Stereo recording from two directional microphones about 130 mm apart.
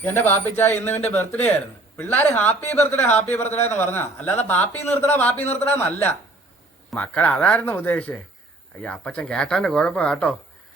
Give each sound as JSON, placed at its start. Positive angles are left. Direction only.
{"t": 0.0, "sound": "speech", "side_deg": 15}